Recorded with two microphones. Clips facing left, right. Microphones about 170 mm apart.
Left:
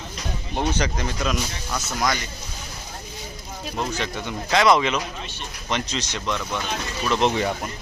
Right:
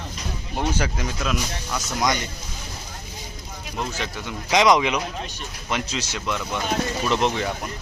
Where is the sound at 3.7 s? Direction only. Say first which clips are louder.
Left 2 dB; 5° right (ahead or behind).